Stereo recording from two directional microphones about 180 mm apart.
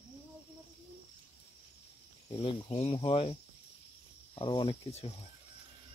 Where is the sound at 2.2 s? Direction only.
30° left (ahead or behind).